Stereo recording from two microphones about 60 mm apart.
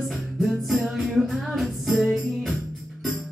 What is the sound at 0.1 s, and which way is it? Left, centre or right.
Music, centre.